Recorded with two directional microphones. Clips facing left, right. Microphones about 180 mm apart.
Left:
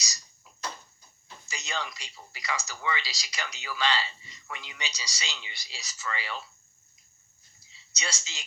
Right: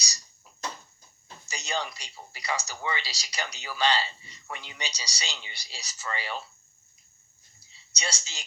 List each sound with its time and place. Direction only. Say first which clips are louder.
1.5 s speech: right 3 dB; 35° right (ahead or behind)
7.9 s speech: right 2 dB; 35° right (ahead or behind)